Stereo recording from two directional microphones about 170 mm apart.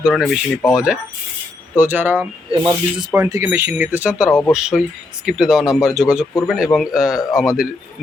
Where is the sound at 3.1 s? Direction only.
15° right (ahead or behind); by 7.6 s centre (ahead or behind).